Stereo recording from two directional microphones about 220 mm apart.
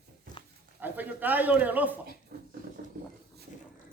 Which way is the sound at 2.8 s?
40° right (ahead or behind).